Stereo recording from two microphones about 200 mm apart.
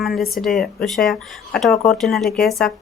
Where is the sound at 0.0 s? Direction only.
Centre (ahead or behind).